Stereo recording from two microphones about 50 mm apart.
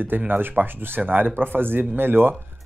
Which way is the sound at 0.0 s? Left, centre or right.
Right.